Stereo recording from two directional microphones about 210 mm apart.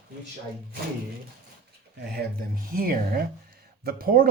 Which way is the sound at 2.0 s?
50° right (ahead or behind).